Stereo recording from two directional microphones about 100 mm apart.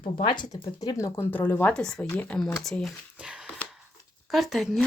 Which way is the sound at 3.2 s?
10° right (ahead or behind).